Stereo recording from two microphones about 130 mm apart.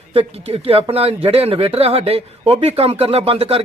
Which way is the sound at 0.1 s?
45° right (ahead or behind).